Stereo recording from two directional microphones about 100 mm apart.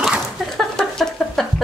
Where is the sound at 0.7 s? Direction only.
5° left (ahead or behind).